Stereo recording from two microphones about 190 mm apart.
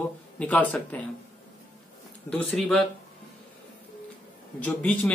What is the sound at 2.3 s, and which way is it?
Speech, 5° left (ahead or behind).